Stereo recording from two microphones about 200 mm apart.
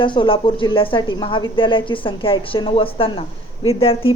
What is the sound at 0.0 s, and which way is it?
Speech, 25° left (ahead or behind).